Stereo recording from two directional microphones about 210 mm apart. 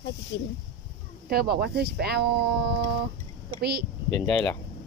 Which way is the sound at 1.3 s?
50° right (ahead or behind).